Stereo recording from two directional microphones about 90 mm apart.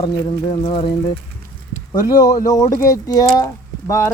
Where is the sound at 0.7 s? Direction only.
75° left (ahead or behind).